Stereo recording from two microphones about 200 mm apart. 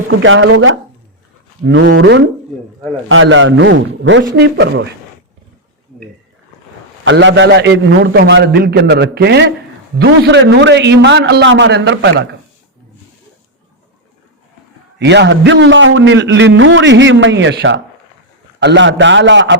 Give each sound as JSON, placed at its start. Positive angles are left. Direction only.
{"t": 0.1, "sound": "speech", "side_deg": -75}
{"t": 1.6, "sound": "a man's voice", "side_deg": -70}
{"t": 7.0, "sound": "a man's voice", "side_deg": -65}
{"t": 14.9, "sound": "a man's voice", "side_deg": -60}